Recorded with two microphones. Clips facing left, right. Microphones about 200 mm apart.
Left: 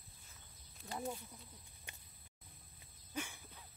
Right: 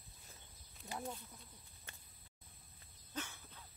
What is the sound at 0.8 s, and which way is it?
Speech, 20° right (ahead or behind).